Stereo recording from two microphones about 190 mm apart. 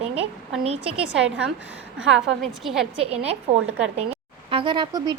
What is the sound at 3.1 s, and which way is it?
Speech, 35° right (ahead or behind).